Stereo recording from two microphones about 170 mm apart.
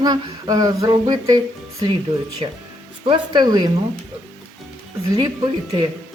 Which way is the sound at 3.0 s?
25° right (ahead or behind).